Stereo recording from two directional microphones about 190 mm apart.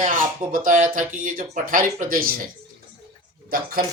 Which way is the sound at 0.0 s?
45° right (ahead or behind).